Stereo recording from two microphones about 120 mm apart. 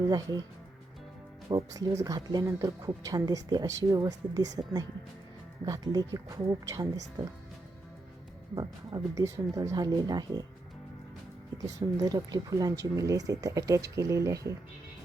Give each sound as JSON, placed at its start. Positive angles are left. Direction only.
{"t": 0.1, "sound": "speech", "side_deg": -35}
{"t": 1.5, "sound": "speech", "side_deg": -30}
{"t": 8.5, "sound": "speech", "side_deg": -35}
{"t": 9.2, "sound": "speech", "side_deg": -25}
{"t": 11.5, "sound": "speech", "side_deg": -30}